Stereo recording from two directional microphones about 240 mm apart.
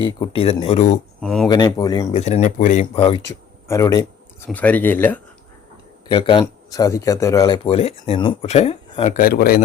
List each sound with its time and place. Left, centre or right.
0.0 s speech: left
1.2 s speech: centre
1.5 s speech: centre
2.1 s speech: left
3.2 s a sound: centre
4.4 s speech: centre
6.1 s speech: left
9.1 s a man's voice: left